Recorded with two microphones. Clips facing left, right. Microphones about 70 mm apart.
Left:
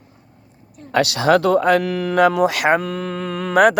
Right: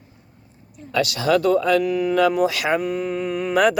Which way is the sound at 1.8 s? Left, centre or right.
Left.